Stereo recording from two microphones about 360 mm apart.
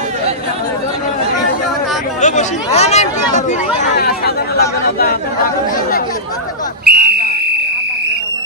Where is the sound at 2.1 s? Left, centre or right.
Centre.